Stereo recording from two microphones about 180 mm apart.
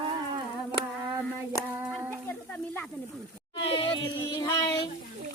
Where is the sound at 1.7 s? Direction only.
15° right (ahead or behind).